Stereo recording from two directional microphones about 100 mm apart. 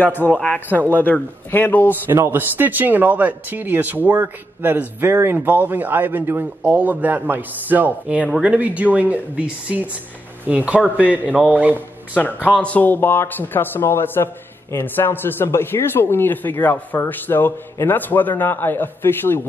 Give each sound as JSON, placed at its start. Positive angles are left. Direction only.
{"t": 0.0, "sound": "speech", "side_deg": 20}
{"t": 2.0, "sound": "speech", "side_deg": -25}
{"t": 11.7, "sound": "speech", "side_deg": 15}